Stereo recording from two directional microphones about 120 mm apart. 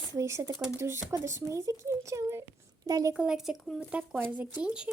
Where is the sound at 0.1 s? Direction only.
25° right (ahead or behind).